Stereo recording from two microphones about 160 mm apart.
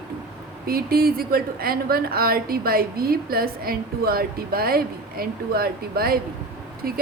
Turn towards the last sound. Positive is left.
turn(degrees=-70)  # may be behind; listen again after turning